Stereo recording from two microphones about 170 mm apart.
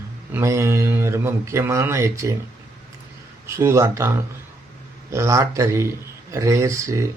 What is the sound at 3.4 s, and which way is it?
Speech, 15° right (ahead or behind).